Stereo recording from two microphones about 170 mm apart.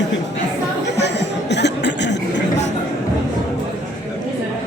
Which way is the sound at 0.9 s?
90° left.